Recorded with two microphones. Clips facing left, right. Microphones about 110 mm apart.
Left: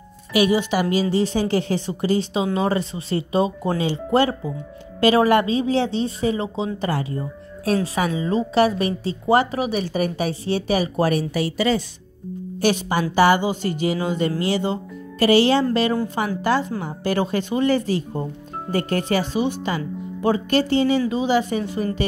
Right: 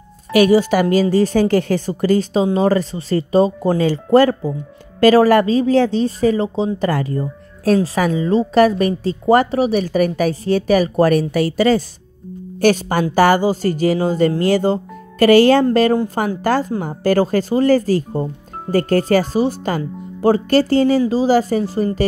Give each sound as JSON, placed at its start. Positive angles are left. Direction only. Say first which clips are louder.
{"t": 0.3, "sound": "a woman's voice", "louder": "right 6 dB", "side_deg": -45}
{"t": 6.9, "sound": "a woman's voice", "louder": "right 5 dB", "side_deg": -45}